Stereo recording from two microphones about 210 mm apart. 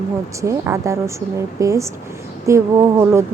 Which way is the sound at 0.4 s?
15° right (ahead or behind).